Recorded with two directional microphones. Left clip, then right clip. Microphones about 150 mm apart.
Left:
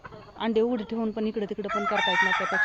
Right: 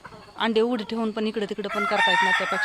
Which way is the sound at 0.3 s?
10° right (ahead or behind).